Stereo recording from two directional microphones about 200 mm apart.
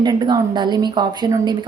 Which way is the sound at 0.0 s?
20° right (ahead or behind).